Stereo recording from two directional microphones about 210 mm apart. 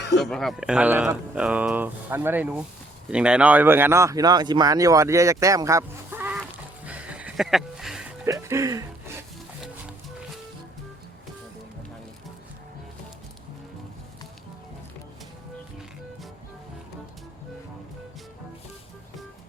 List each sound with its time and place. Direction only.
0.2 s speech: centre (ahead or behind)
6.4 s a sound: 5° right (ahead or behind)
8.3 s speech: 15° right (ahead or behind)